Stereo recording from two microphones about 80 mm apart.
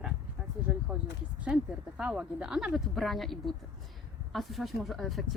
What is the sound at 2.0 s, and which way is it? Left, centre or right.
Speech, centre.